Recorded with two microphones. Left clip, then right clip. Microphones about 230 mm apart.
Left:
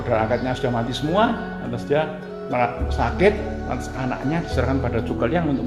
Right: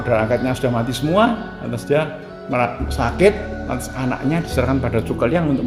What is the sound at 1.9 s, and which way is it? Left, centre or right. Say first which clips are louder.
Speech: right 3 dB; right.